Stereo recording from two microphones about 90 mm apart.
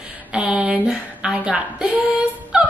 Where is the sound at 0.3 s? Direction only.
10° right (ahead or behind).